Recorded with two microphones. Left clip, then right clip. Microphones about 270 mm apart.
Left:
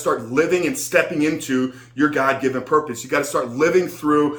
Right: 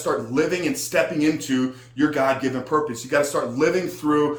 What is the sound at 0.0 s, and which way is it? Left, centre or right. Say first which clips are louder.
Speech: left 3 dB; centre.